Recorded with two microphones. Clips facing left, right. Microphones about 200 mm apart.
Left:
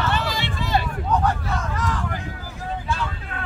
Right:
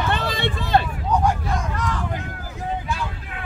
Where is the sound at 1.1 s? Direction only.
10° right (ahead or behind).